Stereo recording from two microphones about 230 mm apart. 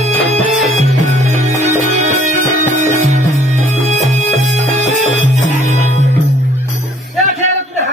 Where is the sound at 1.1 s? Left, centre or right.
Right.